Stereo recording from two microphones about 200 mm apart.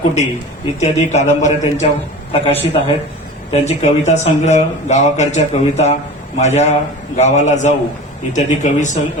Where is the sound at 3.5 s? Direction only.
35° left (ahead or behind).